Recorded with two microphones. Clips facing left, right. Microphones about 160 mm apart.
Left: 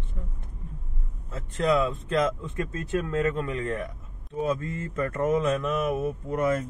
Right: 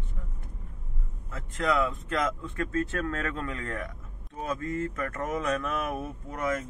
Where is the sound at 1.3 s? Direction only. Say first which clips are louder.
Left 4 dB; 20° left (ahead or behind).